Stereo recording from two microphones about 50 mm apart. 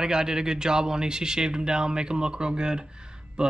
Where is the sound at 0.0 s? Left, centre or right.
Centre.